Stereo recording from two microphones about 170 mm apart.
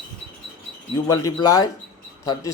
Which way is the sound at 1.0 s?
20° left (ahead or behind).